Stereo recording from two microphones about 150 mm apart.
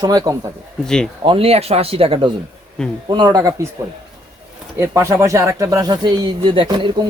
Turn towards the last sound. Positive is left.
turn(degrees=-30)  # may be behind; listen again after turning